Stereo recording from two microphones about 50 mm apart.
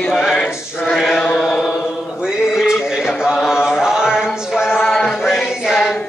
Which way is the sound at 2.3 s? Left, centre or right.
Centre.